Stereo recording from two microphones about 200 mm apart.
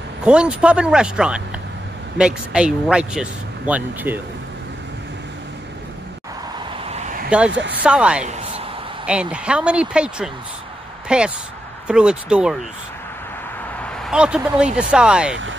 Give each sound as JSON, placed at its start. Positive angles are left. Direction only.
{"t": 0.2, "sound": "a man's voice", "side_deg": -5}
{"t": 6.9, "sound": "a sound", "side_deg": -35}
{"t": 7.2, "sound": "speech", "side_deg": -5}
{"t": 7.5, "sound": "speech", "side_deg": -60}
{"t": 7.8, "sound": "a man's voice", "side_deg": -5}
{"t": 13.8, "sound": "a man's voice", "side_deg": 0}